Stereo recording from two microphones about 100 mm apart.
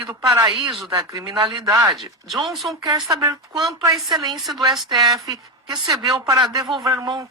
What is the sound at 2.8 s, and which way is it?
Speech, 40° right (ahead or behind).